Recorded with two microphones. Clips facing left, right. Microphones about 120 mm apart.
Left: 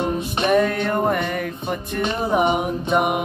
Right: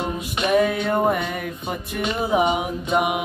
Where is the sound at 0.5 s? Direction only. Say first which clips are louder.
Even; 5° right (ahead or behind).